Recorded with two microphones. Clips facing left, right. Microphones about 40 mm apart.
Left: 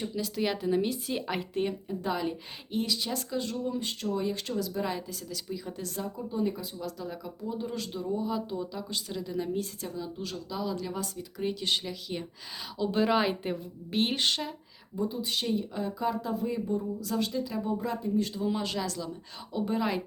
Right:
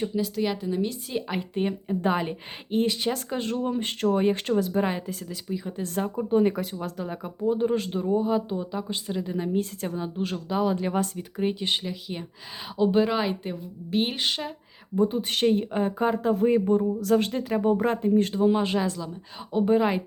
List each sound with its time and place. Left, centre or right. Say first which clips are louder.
0.3 s a woman's voice: left 3 dB; centre
1.9 s speech: right 6 dB; right
5.5 s speech: right 7 dB; right
5.8 s speech: right 7 dB; right
6.7 s speech: right 5 dB; right
9.6 s speech: right 6 dB; right
11.3 s speech: right 5 dB; right
11.7 s speech: right 2 dB; centre
13.0 s a woman's voice: right 2 dB; centre
14.9 s speech: right 7 dB; right
18.4 s speech: right 8 dB; right